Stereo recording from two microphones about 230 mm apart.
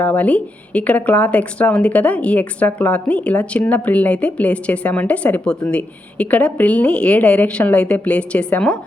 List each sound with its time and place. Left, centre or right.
0.0 s speech: centre